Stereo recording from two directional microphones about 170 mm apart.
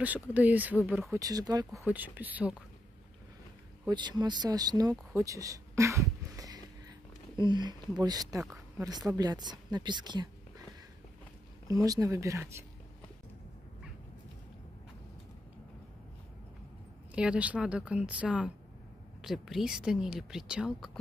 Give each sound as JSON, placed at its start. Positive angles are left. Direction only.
{"t": 0.0, "sound": "a woman's voice", "side_deg": -10}
{"t": 1.9, "sound": "speech", "side_deg": -10}
{"t": 3.8, "sound": "a woman's voice", "side_deg": -25}
{"t": 11.6, "sound": "speech", "side_deg": -20}
{"t": 17.1, "sound": "speech", "side_deg": -5}